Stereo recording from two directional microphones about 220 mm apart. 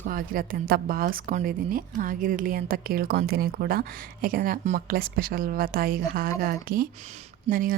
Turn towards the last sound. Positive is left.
turn(degrees=-40)  # may be behind; listen again after turning